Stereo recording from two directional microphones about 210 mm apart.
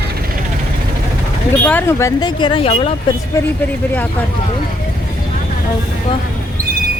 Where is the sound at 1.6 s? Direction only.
10° left (ahead or behind); by 2.9 s 30° left (ahead or behind).